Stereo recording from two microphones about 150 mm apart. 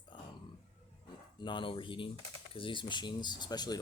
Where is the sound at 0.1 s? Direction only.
30° left (ahead or behind).